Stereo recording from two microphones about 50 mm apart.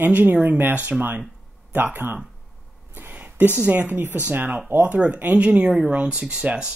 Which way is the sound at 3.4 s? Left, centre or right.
Right.